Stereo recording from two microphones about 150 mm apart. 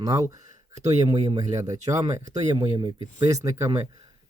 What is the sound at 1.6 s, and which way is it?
Speech, 20° right (ahead or behind).